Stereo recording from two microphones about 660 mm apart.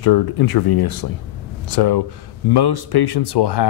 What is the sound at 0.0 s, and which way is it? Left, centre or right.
Speech, left.